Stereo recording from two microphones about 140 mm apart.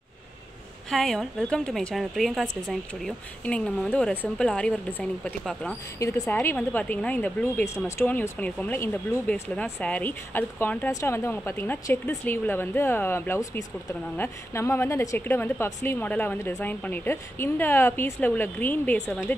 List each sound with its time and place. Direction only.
0.8 s a woman's voice: 5° left (ahead or behind)
5.9 s speech: 25° left (ahead or behind)
6.2 s speech: 15° left (ahead or behind)